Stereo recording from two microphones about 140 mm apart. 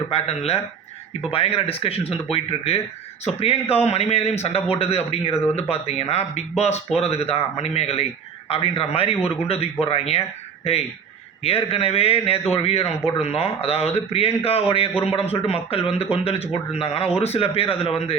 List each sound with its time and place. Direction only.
0.1 s a man's voice: 45° left (ahead or behind)